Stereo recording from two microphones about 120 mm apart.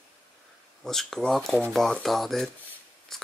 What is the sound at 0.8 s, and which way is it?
Speech, 5° left (ahead or behind).